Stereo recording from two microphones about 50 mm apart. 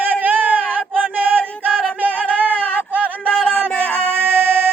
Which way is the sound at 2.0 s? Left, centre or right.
Right.